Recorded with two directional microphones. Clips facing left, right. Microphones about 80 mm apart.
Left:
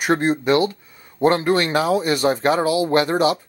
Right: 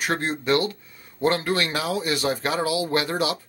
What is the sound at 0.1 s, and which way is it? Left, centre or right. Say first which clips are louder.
Speech: left 7 dB; centre.